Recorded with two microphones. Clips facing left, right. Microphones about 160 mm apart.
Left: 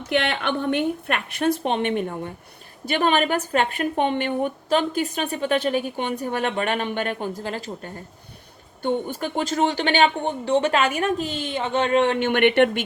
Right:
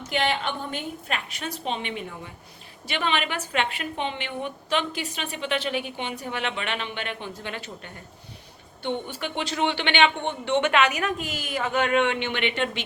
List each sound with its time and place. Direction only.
0.1 s a woman's voice: 65° left (ahead or behind)